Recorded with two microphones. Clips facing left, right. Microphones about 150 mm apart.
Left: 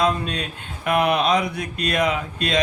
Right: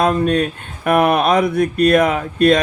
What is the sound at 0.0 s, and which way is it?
Speech, 50° right (ahead or behind).